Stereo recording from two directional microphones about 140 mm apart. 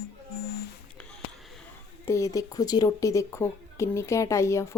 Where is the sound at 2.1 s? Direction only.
20° left (ahead or behind).